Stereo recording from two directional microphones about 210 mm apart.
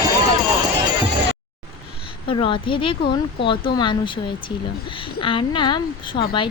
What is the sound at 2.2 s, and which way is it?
A woman's voice, 25° left (ahead or behind).